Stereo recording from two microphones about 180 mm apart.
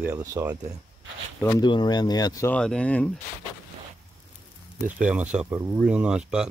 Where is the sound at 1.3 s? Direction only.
15° left (ahead or behind).